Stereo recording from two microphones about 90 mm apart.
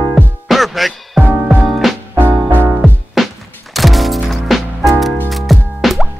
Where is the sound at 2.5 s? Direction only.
20° right (ahead or behind).